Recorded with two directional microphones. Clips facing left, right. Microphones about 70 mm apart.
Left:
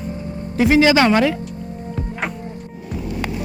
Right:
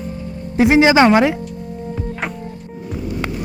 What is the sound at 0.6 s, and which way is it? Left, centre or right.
Speech, right.